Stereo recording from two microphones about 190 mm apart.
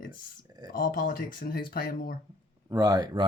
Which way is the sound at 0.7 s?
45° left (ahead or behind).